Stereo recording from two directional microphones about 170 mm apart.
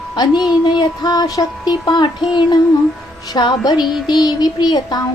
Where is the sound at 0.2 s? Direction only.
25° left (ahead or behind).